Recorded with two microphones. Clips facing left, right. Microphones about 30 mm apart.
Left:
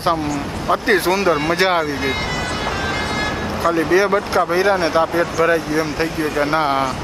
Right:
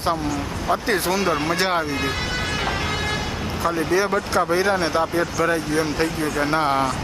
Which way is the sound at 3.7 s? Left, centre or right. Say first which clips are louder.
Left 5 dB; centre.